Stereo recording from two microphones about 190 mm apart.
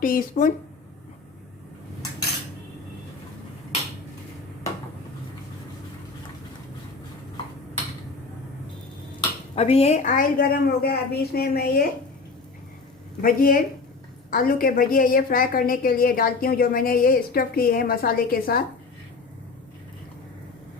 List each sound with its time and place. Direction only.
0.0 s a woman's voice: 45° left (ahead or behind)
9.6 s a woman's voice: 30° left (ahead or behind); by 11.9 s 55° left (ahead or behind)
13.2 s a woman's voice: 50° left (ahead or behind)